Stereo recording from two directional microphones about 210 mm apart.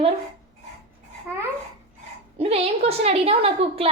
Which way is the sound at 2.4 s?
25° right (ahead or behind).